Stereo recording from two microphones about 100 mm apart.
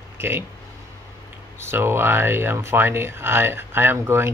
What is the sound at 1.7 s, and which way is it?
Speech, 25° right (ahead or behind).